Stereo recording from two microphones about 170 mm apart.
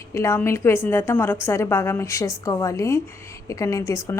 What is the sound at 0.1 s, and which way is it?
A woman's voice, 15° left (ahead or behind).